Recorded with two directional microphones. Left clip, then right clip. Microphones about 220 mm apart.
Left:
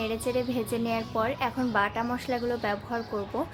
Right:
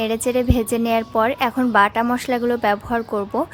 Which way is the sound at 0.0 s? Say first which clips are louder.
Right 9 dB; 45° right (ahead or behind).